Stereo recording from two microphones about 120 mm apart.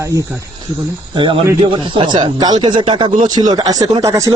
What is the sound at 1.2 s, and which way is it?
Speech, 40° right (ahead or behind).